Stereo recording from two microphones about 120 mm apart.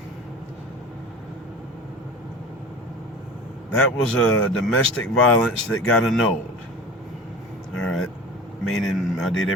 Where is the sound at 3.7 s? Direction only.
10° left (ahead or behind).